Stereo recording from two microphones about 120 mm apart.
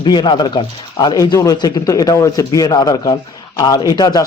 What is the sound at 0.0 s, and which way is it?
Speech, 40° left (ahead or behind).